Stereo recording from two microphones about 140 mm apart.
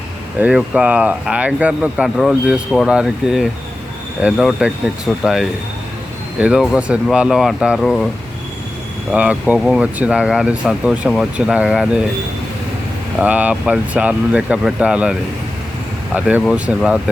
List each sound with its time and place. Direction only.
0.3 s speech: 10° right (ahead or behind)
9.1 s speech: 10° right (ahead or behind)
13.1 s speech: 10° right (ahead or behind)
16.1 s speech: 10° right (ahead or behind)